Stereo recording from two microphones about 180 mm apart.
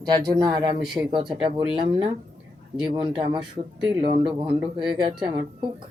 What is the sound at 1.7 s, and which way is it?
Speech, 30° right (ahead or behind).